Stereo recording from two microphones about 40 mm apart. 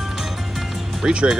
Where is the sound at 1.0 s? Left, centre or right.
Centre.